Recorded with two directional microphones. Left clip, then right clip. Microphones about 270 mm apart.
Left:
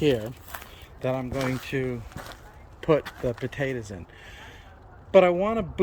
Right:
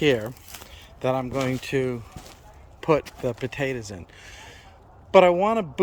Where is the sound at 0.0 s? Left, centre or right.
Centre.